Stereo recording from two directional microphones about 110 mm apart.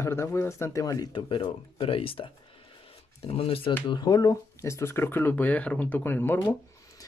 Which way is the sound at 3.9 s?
40° left (ahead or behind).